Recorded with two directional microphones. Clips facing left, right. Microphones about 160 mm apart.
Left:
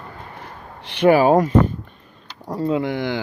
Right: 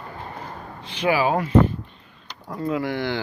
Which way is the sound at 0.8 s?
65° left (ahead or behind).